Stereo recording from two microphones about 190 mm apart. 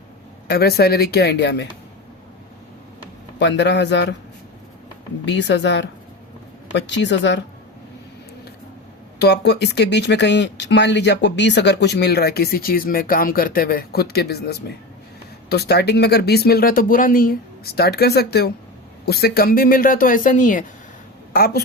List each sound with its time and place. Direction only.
0.4 s speech: 55° left (ahead or behind)
3.3 s a man's voice: 65° left (ahead or behind)
5.2 s a man's voice: 65° left (ahead or behind)
9.1 s speech: 60° left (ahead or behind)